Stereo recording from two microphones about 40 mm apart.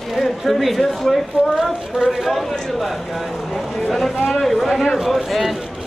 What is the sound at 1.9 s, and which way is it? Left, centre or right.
Speech, centre.